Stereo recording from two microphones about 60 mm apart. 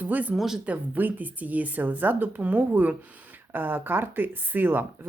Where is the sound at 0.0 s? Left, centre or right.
Right.